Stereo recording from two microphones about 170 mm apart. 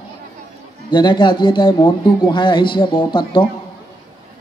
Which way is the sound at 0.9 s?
25° left (ahead or behind).